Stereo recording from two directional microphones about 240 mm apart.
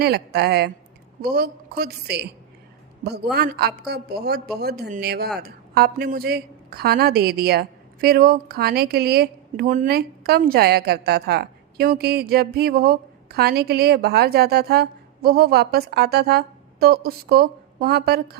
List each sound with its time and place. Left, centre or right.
0.0 s a woman's voice: right